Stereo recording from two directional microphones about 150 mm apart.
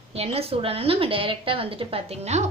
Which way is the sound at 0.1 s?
40° right (ahead or behind).